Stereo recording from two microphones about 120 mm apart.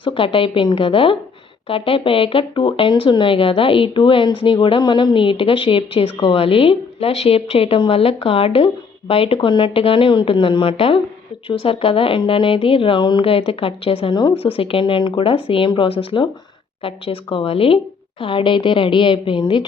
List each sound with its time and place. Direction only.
0.0 s speech: 45° left (ahead or behind)
17.3 s speech: 50° left (ahead or behind)